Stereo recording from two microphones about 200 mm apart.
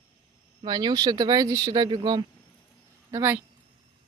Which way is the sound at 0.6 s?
20° right (ahead or behind).